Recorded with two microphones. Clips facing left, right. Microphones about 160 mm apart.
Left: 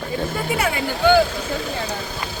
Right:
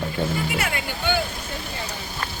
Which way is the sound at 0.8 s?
90° left.